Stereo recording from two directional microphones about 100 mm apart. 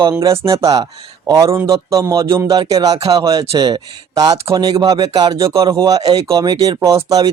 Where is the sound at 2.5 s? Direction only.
40° right (ahead or behind).